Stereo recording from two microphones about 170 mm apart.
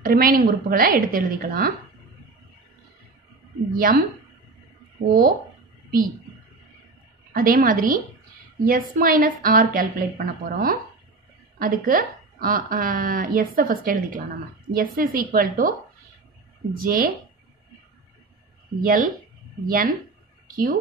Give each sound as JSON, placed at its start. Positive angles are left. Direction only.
{"t": 0.0, "sound": "a woman's voice", "side_deg": -60}
{"t": 3.7, "sound": "a woman's voice", "side_deg": -55}
{"t": 5.0, "sound": "a woman's voice", "side_deg": -55}
{"t": 7.3, "sound": "a woman's voice", "side_deg": -55}
{"t": 16.8, "sound": "a woman's voice", "side_deg": -60}
{"t": 18.8, "sound": "a woman's voice", "side_deg": -55}
{"t": 20.4, "sound": "speech", "side_deg": -55}